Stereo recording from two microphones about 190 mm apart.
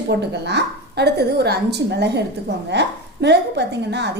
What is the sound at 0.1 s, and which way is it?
A woman's voice, 60° right (ahead or behind).